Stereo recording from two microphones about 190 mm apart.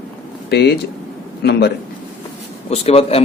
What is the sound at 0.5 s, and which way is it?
A man's voice, 60° left (ahead or behind).